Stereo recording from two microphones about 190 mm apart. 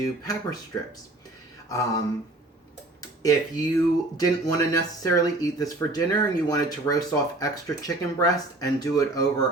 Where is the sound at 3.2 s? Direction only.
20° left (ahead or behind).